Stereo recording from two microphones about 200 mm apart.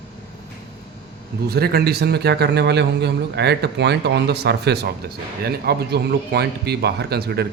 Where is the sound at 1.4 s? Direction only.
50° right (ahead or behind).